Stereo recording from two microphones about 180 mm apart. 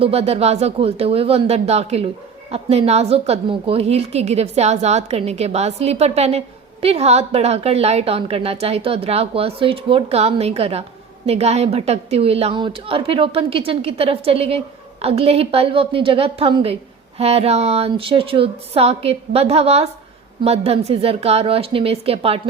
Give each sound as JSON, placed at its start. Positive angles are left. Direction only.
{"t": 0.0, "sound": "a woman's voice", "side_deg": -35}